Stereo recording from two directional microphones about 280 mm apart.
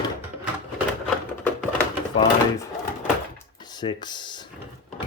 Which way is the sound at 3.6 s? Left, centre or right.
Centre.